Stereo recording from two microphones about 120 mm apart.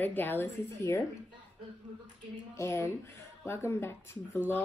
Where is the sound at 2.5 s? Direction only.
25° left (ahead or behind).